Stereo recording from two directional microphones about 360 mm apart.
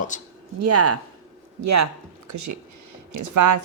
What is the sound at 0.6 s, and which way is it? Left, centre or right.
A woman's voice, right.